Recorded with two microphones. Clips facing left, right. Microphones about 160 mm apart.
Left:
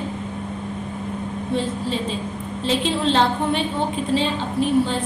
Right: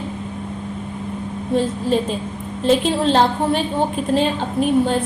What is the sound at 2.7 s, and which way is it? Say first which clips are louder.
A woman's voice: right 5 dB; 40° right (ahead or behind).